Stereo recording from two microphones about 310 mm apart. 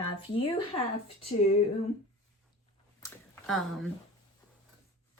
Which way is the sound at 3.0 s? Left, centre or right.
Centre.